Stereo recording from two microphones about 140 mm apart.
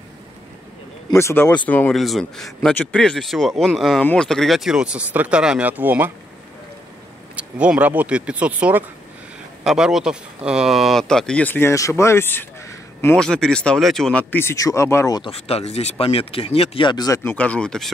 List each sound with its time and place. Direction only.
1.1 s speech: 15° left (ahead or behind)
2.0 s speech: centre (ahead or behind)
7.3 s speech: 10° right (ahead or behind); by 13.2 s 15° left (ahead or behind)
13.2 s speech: 5° left (ahead or behind)
14.3 s speech: 20° left (ahead or behind)
15.2 s speech: 45° left (ahead or behind); by 17.3 s 25° left (ahead or behind)
17.3 s speech: 10° left (ahead or behind)